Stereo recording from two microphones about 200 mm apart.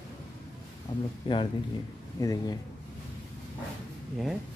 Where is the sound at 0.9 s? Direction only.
35° left (ahead or behind); by 2.6 s 20° left (ahead or behind).